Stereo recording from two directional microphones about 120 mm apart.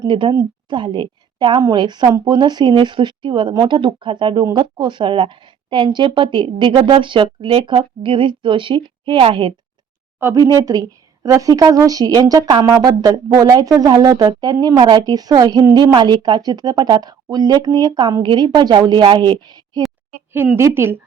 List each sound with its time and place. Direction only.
0.0 s a woman's voice: 40° right (ahead or behind)
10.2 s speech: 25° right (ahead or behind)
20.6 s a woman's voice: 20° right (ahead or behind)